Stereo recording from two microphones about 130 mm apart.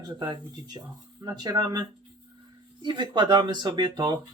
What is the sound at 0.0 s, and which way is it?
A man's voice, 30° right (ahead or behind).